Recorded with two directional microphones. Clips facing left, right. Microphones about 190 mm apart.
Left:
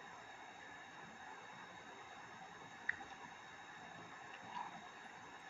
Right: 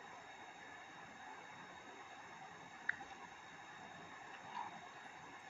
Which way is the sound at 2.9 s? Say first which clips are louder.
Right 1 dB; 20° left (ahead or behind).